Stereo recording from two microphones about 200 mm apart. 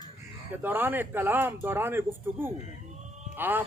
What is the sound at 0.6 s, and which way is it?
Speech, 10° right (ahead or behind).